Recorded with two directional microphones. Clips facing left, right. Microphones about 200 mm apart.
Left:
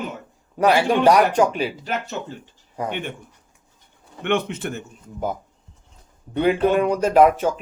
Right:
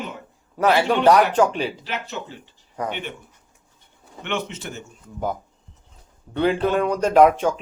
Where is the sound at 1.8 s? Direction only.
50° left (ahead or behind).